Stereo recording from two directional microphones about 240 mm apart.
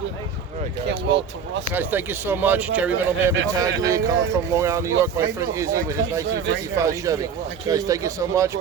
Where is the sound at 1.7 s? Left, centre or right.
Centre.